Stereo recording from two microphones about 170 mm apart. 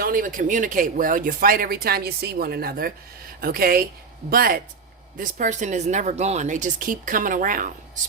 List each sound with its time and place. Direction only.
0.0 s speech: 55° right (ahead or behind)